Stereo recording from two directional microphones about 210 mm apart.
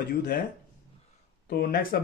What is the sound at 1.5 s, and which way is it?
Speech, 45° left (ahead or behind).